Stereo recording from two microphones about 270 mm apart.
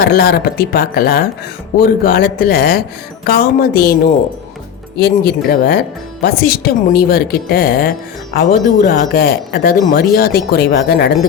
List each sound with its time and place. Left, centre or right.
0.0 s a woman's voice: left
4.9 s a woman's voice: left